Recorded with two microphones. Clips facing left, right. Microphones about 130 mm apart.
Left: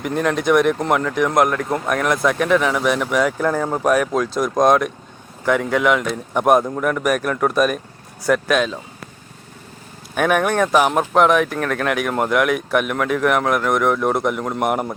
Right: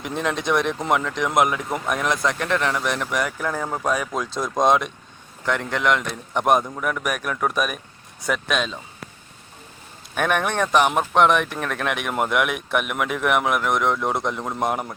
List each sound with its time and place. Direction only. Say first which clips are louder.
0.0 s speech: left 5 dB; centre (ahead or behind)
10.2 s speech: left 5 dB; 5° left (ahead or behind)
14.7 s speech: left 5 dB; 20° left (ahead or behind)